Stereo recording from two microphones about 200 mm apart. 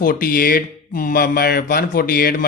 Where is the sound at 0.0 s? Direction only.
45° left (ahead or behind).